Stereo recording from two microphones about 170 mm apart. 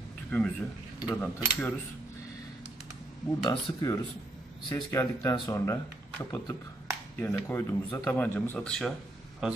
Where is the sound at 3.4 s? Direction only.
20° left (ahead or behind); by 8.9 s 5° left (ahead or behind).